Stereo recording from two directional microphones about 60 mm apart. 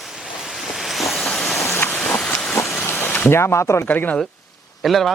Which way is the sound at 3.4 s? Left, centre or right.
Left.